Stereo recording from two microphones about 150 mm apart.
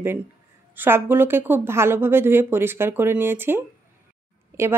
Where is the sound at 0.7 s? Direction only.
15° right (ahead or behind).